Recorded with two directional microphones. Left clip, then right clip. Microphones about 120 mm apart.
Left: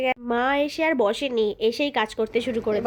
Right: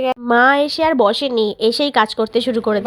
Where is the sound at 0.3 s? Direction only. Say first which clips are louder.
Right 14 dB; 50° right (ahead or behind).